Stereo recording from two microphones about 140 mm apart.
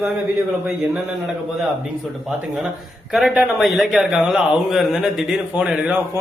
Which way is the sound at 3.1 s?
Centre (ahead or behind).